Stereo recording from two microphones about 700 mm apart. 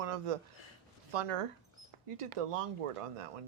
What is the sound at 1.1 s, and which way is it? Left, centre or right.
Speech, right.